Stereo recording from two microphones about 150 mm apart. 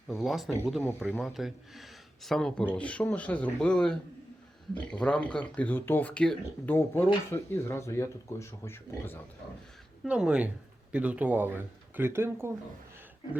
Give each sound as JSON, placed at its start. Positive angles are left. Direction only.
{"t": 0.2, "sound": "speech", "side_deg": 0}
{"t": 0.8, "sound": "speech", "side_deg": 15}
{"t": 1.2, "sound": "speech", "side_deg": 0}
{"t": 10.0, "sound": "speech", "side_deg": -5}